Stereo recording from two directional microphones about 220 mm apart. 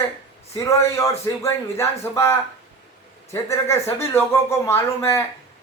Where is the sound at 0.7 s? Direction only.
15° left (ahead or behind).